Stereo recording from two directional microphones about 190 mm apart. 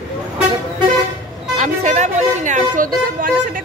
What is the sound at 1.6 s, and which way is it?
Speech, 40° right (ahead or behind).